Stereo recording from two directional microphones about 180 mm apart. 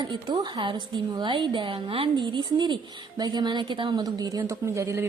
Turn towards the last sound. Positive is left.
turn(degrees=-15)  # may be behind; listen again after turning